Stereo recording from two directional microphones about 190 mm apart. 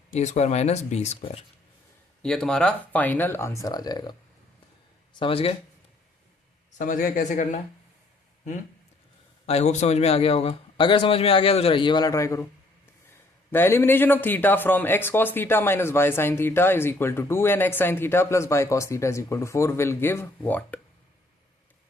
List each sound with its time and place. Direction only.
0.1 s speech: 40° left (ahead or behind)
2.2 s speech: 5° left (ahead or behind); by 4.1 s 20° left (ahead or behind)
5.2 s a man's voice: 30° left (ahead or behind)
6.7 s speech: 45° left (ahead or behind)
9.5 s a man's voice: 35° left (ahead or behind); by 12.5 s 15° left (ahead or behind)
13.5 s speech: 10° left (ahead or behind)